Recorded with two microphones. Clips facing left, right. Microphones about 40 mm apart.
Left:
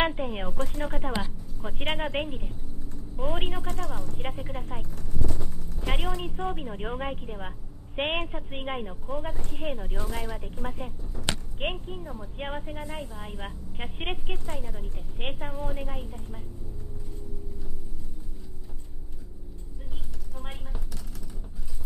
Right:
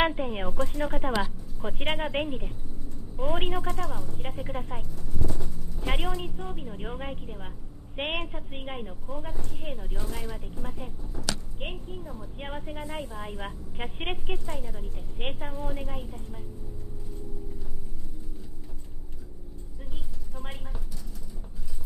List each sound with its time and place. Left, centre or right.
0.0 s a woman's voice: centre
6.3 s a woman's voice: left
9.4 s speech: left
9.7 s a woman's voice: centre
11.1 s speech: left
11.9 s a woman's voice: centre
12.6 s a woman's voice: centre